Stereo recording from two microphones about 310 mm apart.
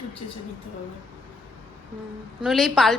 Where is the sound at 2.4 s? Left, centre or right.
Centre.